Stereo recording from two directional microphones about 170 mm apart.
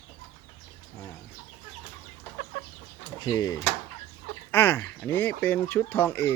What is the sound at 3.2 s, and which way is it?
Speech, 20° left (ahead or behind).